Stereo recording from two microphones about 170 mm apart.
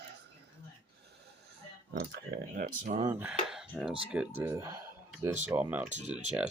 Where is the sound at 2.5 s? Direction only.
50° right (ahead or behind).